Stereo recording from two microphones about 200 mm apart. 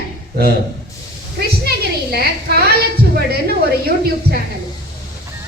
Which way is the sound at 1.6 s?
50° right (ahead or behind).